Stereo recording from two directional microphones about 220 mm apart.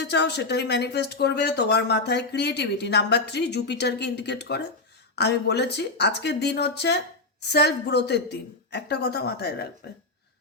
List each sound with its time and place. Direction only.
0.0 s speech: 50° left (ahead or behind)